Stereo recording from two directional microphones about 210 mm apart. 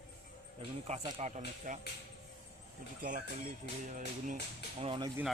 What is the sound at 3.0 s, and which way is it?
Speech, 40° right (ahead or behind).